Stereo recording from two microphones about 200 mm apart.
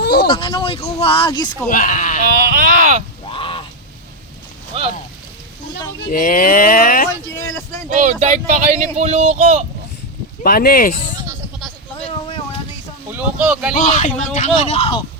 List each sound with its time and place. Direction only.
0.0 s a sound: 55° left (ahead or behind)
0.3 s speech: 20° left (ahead or behind)
1.7 s speech: 40° left (ahead or behind)
2.2 s speech: 45° right (ahead or behind)
3.2 s a sound: 25° left (ahead or behind)
4.7 s speech: 30° right (ahead or behind)
6.1 s speech: 45° left (ahead or behind)
7.9 s speech: 35° right (ahead or behind)
10.4 s speech: 50° left (ahead or behind)
13.1 s speech: 5° right (ahead or behind)
13.7 s speech: 40° left (ahead or behind)